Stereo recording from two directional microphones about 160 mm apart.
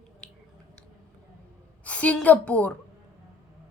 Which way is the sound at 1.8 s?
10° left (ahead or behind).